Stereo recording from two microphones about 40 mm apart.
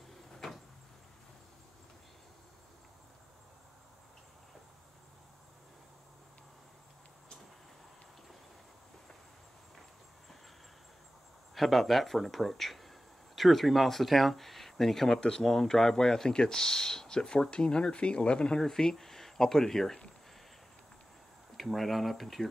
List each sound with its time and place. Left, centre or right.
11.5 s speech: centre
15.1 s speech: left
15.4 s speech: centre; by 18.6 s left
18.6 s speech: centre
21.5 s speech: centre